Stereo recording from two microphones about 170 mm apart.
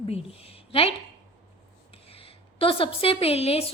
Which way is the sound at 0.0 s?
35° left (ahead or behind).